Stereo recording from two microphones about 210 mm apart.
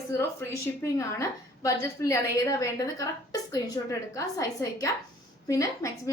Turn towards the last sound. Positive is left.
turn(degrees=15)  # may be behind; listen again after turning